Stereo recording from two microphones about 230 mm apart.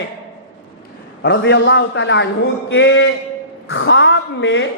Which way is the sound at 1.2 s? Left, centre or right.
Left.